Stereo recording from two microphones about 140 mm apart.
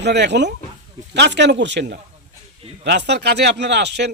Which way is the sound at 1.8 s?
90° right.